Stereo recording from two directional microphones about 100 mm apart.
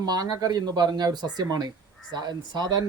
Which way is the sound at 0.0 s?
40° right (ahead or behind).